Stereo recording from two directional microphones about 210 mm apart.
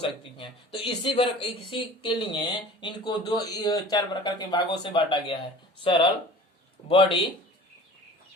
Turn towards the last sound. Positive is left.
turn(degrees=25)  # may be behind; listen again after turning